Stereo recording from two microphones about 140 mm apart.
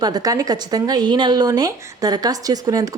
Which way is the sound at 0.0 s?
25° right (ahead or behind).